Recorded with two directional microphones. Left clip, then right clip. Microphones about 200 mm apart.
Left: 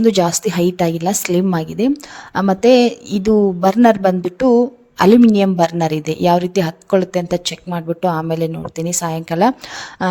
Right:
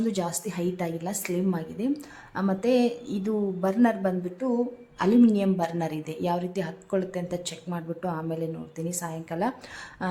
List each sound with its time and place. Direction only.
0.0 s a woman's voice: 45° left (ahead or behind)